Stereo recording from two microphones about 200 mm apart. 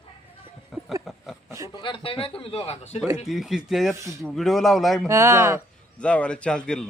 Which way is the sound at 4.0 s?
15° right (ahead or behind).